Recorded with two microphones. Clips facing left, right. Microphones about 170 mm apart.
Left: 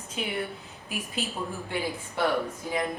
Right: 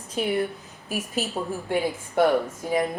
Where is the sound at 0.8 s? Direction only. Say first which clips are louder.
Right 6 dB; 45° right (ahead or behind).